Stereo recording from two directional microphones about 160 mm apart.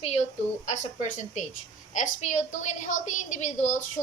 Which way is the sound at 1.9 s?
50° left (ahead or behind).